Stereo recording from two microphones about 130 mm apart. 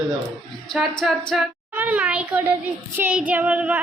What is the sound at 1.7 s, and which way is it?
Speech, 10° right (ahead or behind).